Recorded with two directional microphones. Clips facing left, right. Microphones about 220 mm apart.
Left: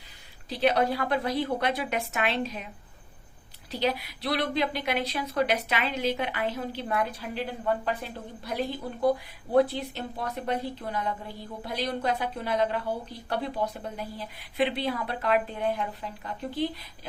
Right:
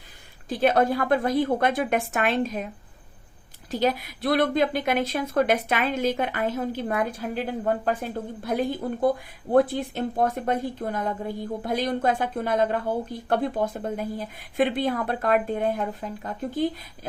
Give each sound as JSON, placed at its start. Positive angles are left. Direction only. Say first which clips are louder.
{"t": 0.4, "sound": "a woman's voice", "louder": "right 4 dB", "side_deg": -50}
{"t": 3.7, "sound": "a woman's voice", "louder": "right 4 dB", "side_deg": -45}